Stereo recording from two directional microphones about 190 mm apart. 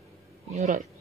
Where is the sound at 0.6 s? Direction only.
40° right (ahead or behind).